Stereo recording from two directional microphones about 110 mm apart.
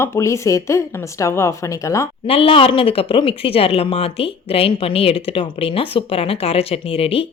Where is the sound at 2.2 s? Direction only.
60° left (ahead or behind).